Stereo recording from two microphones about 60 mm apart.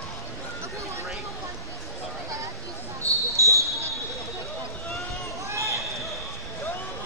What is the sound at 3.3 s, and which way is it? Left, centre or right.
Basketball bounce, right.